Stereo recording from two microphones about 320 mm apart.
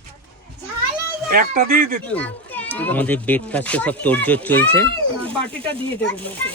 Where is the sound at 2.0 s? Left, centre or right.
Centre.